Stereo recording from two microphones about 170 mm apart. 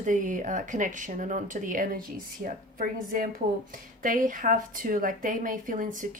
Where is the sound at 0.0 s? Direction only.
50° right (ahead or behind).